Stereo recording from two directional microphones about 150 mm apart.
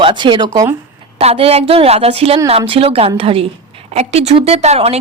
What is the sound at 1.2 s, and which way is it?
A woman's voice, 40° right (ahead or behind).